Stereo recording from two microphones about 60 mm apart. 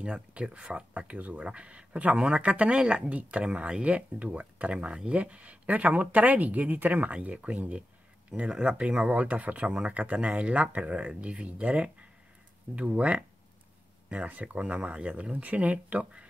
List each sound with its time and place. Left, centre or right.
0.0 s speech: right